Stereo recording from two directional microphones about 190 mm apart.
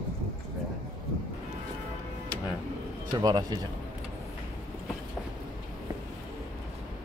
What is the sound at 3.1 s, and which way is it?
Speech, 20° right (ahead or behind).